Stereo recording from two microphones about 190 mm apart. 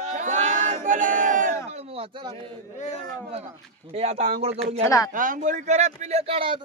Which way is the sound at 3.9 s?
35° right (ahead or behind).